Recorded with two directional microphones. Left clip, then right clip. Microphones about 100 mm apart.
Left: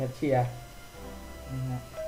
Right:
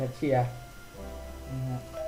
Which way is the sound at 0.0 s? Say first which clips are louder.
Even; centre (ahead or behind).